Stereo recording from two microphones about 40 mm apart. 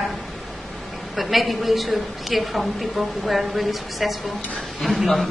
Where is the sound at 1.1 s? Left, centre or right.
Centre.